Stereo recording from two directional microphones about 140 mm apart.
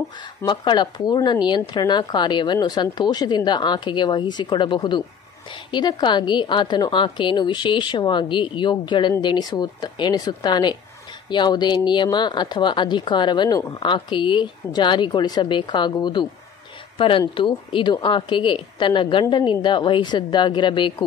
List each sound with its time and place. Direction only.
0.5 s speech: 35° left (ahead or behind)
17.4 s speech: 35° left (ahead or behind)